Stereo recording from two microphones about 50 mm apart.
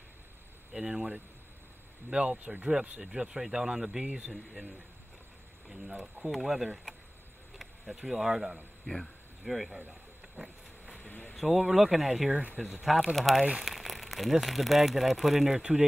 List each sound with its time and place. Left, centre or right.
0.7 s speech: centre
3.0 s speech: centre
5.9 s speech: centre
8.8 s speech: centre
10.3 s vehicle: centre
11.1 s a sound: left
11.6 s speech: centre